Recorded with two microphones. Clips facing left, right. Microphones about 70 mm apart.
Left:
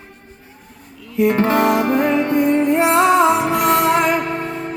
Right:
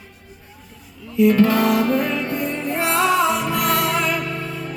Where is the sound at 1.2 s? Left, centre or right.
Left.